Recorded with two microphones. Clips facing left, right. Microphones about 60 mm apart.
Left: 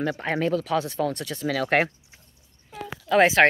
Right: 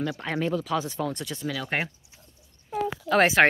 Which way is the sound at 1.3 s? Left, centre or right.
Left.